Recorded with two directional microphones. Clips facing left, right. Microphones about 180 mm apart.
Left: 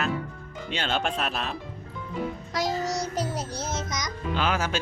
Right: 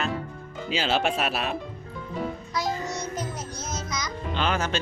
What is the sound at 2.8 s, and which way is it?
Child singing, 40° left (ahead or behind).